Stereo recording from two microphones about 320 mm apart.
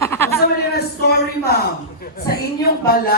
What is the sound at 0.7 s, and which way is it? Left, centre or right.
A woman's voice, left.